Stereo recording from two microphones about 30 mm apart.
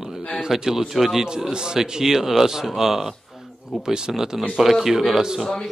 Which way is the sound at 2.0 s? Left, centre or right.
Centre.